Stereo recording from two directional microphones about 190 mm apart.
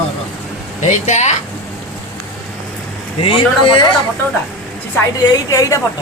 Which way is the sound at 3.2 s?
25° left (ahead or behind).